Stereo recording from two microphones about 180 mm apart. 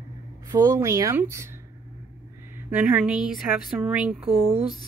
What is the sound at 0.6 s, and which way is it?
Speech, 15° right (ahead or behind).